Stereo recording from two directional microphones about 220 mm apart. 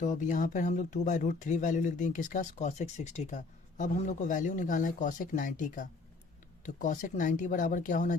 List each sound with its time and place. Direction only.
0.0 s speech: 35° left (ahead or behind)